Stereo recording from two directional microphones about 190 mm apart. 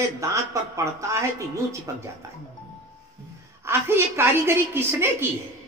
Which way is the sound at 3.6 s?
15° right (ahead or behind).